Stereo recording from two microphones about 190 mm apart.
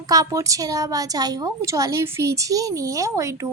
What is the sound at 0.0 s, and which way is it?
A woman's voice, 20° right (ahead or behind).